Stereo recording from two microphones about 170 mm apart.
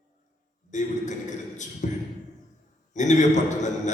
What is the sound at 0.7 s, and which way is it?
Speech, 45° left (ahead or behind).